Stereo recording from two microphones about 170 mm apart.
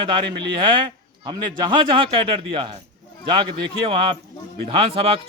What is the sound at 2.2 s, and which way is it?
A man's voice, 30° right (ahead or behind).